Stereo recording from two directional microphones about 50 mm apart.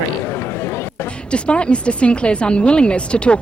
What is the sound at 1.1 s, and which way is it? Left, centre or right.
Speech, left.